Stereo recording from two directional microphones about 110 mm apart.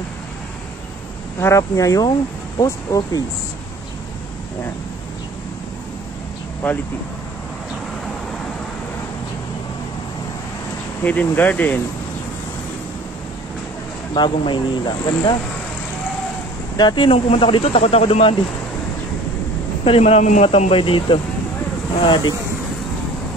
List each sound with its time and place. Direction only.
1.4 s speech: 30° left (ahead or behind)
11.1 s speech: 15° left (ahead or behind)
14.1 s speech: 45° left (ahead or behind)
16.7 s speech: 45° left (ahead or behind)
17.3 s speech: 55° left (ahead or behind)
19.8 s speech: 60° left (ahead or behind); by 20.4 s 90° left
20.4 s speech: 65° left (ahead or behind)
22.0 s speech: 45° left (ahead or behind)